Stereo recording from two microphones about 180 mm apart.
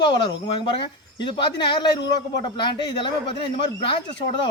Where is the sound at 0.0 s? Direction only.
25° left (ahead or behind).